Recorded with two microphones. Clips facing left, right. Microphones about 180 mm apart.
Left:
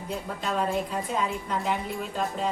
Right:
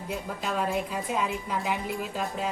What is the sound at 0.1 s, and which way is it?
A woman's voice, 5° right (ahead or behind).